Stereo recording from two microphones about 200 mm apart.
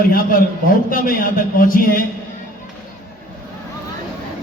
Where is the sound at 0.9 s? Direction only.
45° left (ahead or behind).